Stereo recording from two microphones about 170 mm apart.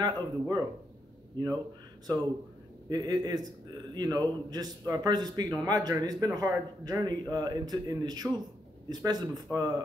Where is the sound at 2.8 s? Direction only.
25° right (ahead or behind).